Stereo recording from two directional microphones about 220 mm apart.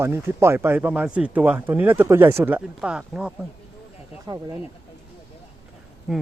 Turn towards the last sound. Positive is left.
turn(degrees=-5)  # may be behind; listen again after turning